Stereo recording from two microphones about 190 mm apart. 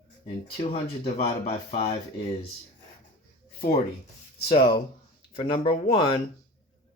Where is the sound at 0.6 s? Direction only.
35° left (ahead or behind).